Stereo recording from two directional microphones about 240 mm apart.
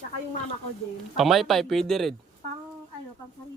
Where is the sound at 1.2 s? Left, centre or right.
Centre.